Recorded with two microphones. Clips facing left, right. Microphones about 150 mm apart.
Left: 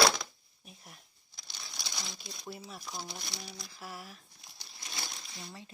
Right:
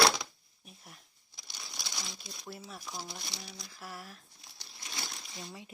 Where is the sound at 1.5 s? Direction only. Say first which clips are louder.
Even; 10° right (ahead or behind).